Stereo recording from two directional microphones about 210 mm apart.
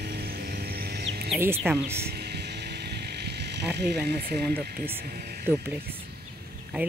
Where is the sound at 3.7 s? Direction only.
50° right (ahead or behind).